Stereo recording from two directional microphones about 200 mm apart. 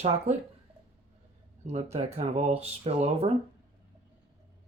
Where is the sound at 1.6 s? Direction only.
30° right (ahead or behind).